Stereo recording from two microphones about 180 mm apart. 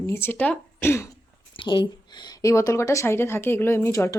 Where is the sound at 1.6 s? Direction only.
25° left (ahead or behind).